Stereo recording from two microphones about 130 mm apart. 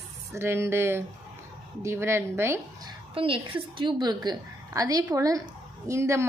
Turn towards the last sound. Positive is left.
turn(degrees=-20)  # may be behind; listen again after turning